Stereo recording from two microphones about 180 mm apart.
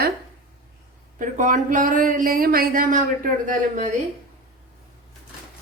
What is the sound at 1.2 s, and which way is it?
Speech, 45° right (ahead or behind).